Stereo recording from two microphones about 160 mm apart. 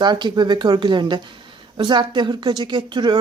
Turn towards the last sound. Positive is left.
turn(degrees=-30)  # may be behind; listen again after turning